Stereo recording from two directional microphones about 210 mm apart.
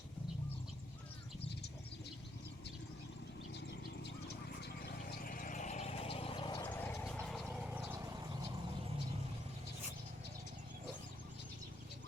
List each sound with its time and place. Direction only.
3.5 s vehicle: 55° left (ahead or behind); by 6.7 s 25° left (ahead or behind)
6.7 s vehicle: 10° left (ahead or behind)
7.9 s vehicle: 15° right (ahead or behind)